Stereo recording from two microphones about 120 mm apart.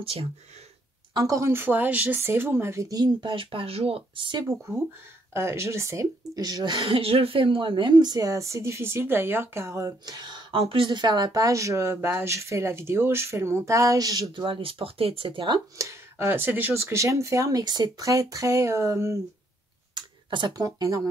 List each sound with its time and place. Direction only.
0.0 s speech: 55° right (ahead or behind)
1.1 s speech: 30° right (ahead or behind)
5.3 s speech: 20° right (ahead or behind)
14.3 s speech: 45° right (ahead or behind)
15.8 s speech: 25° right (ahead or behind)
19.9 s speech: 40° right (ahead or behind)